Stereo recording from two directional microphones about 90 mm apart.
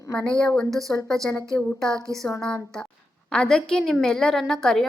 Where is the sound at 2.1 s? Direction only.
40° right (ahead or behind).